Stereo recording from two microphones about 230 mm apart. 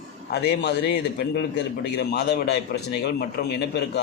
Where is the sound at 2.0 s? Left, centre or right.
Left.